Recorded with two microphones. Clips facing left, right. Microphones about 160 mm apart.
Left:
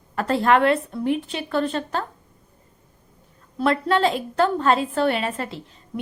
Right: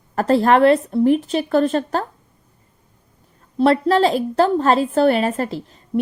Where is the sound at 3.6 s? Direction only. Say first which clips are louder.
Right 5 dB; 35° right (ahead or behind).